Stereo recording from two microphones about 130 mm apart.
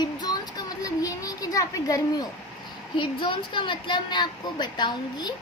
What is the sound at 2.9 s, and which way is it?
A woman's voice, 40° left (ahead or behind).